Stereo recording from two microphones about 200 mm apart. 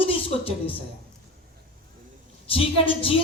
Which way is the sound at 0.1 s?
25° left (ahead or behind).